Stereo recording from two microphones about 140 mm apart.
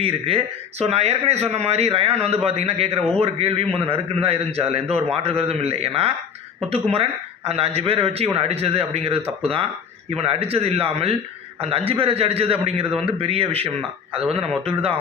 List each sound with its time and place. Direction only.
0.0 s speech: 45° right (ahead or behind)